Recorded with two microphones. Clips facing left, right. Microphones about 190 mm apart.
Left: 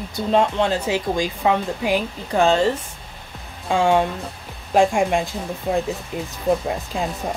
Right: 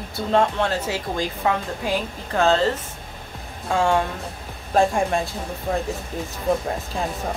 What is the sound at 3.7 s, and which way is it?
Speech, 15° left (ahead or behind).